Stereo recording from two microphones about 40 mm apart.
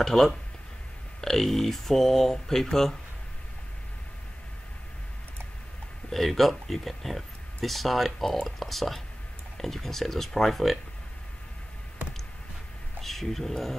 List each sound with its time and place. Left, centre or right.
0.0 s speech: centre
6.1 s speech: centre
13.0 s speech: centre